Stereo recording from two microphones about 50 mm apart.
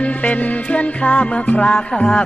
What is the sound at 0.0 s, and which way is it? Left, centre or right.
Music, left.